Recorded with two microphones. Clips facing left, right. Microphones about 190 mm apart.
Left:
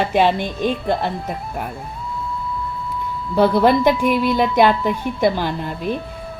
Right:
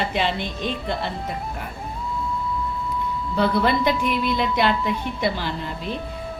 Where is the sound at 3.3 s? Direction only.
50° left (ahead or behind).